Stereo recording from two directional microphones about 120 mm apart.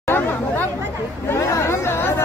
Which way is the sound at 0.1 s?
15° left (ahead or behind).